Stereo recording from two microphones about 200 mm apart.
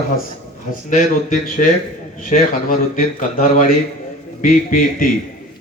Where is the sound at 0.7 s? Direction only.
40° left (ahead or behind).